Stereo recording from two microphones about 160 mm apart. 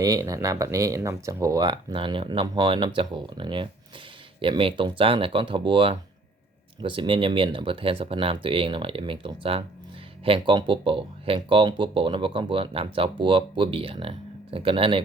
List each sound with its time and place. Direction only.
0.0 s speech: 20° right (ahead or behind)